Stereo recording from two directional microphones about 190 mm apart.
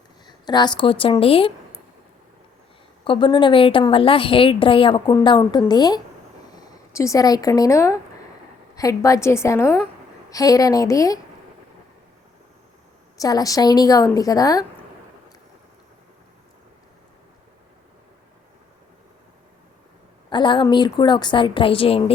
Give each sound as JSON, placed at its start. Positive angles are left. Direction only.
{"t": 0.3, "sound": "speech", "side_deg": 20}
{"t": 3.0, "sound": "a woman's voice", "side_deg": 25}
{"t": 13.1, "sound": "a woman's voice", "side_deg": 20}
{"t": 20.3, "sound": "a woman's voice", "side_deg": 25}